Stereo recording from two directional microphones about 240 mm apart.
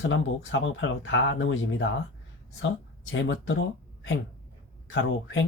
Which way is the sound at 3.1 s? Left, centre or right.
Left.